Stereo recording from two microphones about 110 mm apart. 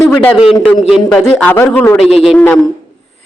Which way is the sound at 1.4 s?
15° left (ahead or behind).